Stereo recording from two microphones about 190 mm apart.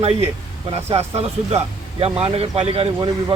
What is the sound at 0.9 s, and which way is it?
A man's voice, 35° right (ahead or behind).